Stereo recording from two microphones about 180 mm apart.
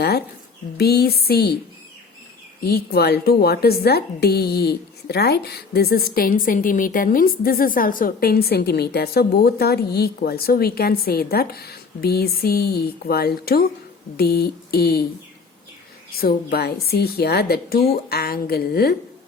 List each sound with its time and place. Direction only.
0.8 s a woman's voice: 60° left (ahead or behind)
2.6 s a woman's voice: 60° left (ahead or behind)
16.1 s a woman's voice: 60° left (ahead or behind)